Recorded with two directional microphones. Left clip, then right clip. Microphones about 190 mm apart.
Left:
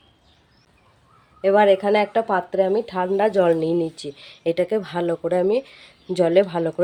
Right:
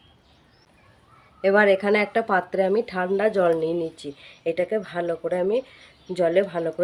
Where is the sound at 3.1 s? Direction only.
30° left (ahead or behind).